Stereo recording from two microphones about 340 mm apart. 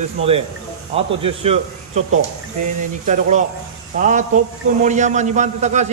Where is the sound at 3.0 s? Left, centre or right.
Right.